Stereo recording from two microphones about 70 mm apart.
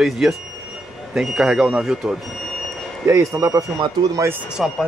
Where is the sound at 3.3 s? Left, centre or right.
Right.